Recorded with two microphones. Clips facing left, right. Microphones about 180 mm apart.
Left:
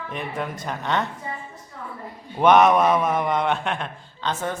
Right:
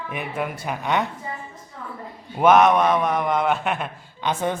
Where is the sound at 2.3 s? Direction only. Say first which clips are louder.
Even; centre (ahead or behind).